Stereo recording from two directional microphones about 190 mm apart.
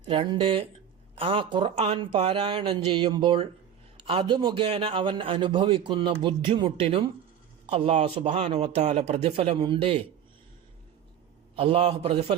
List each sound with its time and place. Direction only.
0.0 s a man's voice: 25° right (ahead or behind)
11.5 s a man's voice: 30° right (ahead or behind)